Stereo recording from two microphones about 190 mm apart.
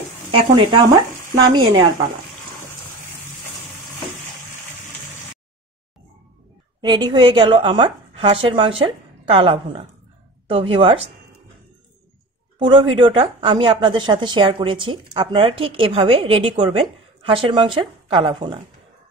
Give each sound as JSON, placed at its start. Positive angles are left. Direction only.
{"t": 0.3, "sound": "a woman's voice", "side_deg": -20}
{"t": 6.8, "sound": "a woman's voice", "side_deg": -25}
{"t": 12.5, "sound": "a woman's voice", "side_deg": -25}